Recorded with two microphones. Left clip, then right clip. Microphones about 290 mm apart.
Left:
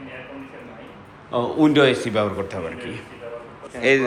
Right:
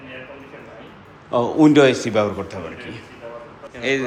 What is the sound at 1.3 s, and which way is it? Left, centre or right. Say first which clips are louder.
A man's voice: right 4 dB; centre.